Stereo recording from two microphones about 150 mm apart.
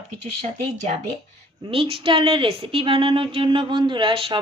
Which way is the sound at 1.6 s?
35° right (ahead or behind).